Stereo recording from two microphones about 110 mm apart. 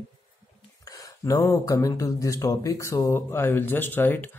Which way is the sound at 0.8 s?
30° left (ahead or behind).